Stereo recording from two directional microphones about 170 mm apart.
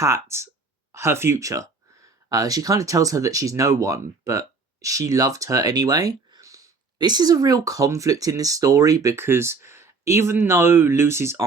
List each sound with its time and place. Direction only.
0.0 s speech: 15° right (ahead or behind)